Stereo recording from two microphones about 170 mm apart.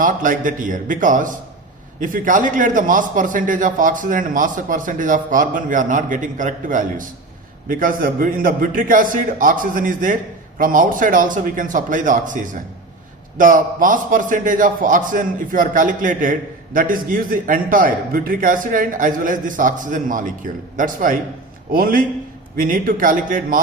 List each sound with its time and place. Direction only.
0.0 s a man's voice: 50° right (ahead or behind)